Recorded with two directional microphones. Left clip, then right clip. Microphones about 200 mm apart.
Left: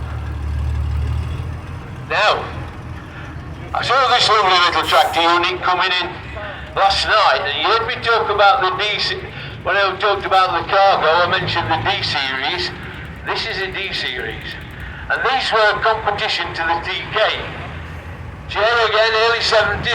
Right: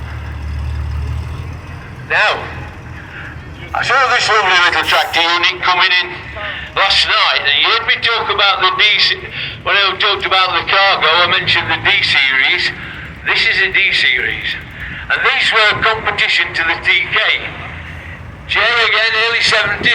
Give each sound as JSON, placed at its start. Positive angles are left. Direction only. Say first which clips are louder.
{"t": 2.0, "sound": "a man's voice", "louder": "right 2 dB", "side_deg": 65}
{"t": 3.8, "sound": "a man's voice", "louder": "right 2 dB", "side_deg": 65}
{"t": 18.4, "sound": "a man's voice", "louder": "right 3 dB", "side_deg": 30}